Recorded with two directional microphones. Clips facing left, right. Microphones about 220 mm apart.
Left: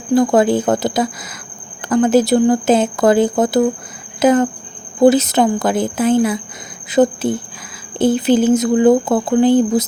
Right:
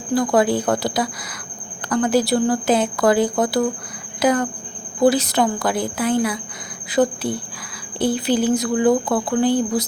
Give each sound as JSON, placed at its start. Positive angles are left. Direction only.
{"t": 0.1, "sound": "speech", "side_deg": 25}